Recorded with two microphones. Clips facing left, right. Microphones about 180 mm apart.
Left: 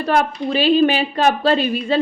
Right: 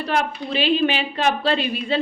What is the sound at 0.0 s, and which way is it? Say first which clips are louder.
A woman's voice: left 5 dB; 40° left (ahead or behind).